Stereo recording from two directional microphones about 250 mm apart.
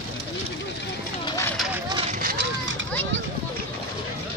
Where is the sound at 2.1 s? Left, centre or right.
Right.